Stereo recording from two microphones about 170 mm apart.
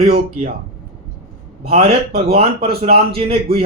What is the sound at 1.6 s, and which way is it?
Speech, 65° right (ahead or behind).